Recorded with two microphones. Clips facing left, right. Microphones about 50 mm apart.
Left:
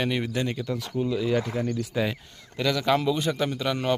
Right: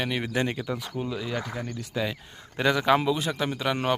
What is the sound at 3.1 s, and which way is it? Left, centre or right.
Speech, centre.